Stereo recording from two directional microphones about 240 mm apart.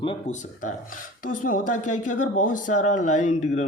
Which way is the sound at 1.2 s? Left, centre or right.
Left.